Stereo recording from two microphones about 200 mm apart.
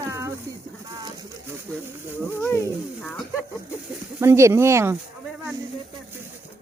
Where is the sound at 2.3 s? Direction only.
10° left (ahead or behind).